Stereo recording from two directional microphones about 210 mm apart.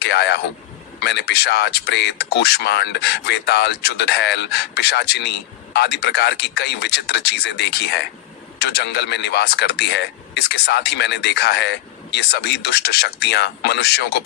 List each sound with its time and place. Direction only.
0.0 s speech: 55° left (ahead or behind)